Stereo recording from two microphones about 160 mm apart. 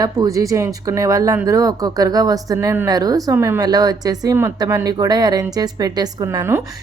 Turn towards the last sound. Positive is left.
turn(degrees=-15)  # may be behind; listen again after turning